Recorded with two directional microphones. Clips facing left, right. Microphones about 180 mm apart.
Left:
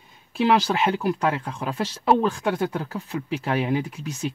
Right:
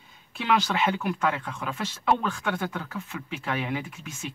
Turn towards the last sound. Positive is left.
turn(degrees=35)  # may be behind; listen again after turning